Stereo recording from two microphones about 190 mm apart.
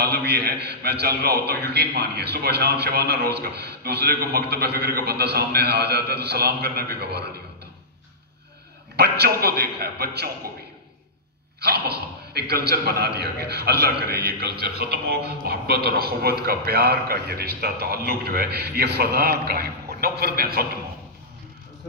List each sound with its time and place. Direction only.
0.0 s a man's voice: 60° right (ahead or behind)
8.9 s a man's voice: 60° right (ahead or behind)
11.6 s a man's voice: 55° right (ahead or behind)